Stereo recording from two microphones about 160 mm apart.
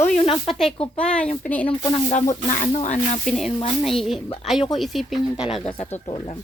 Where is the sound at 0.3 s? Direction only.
Centre (ahead or behind).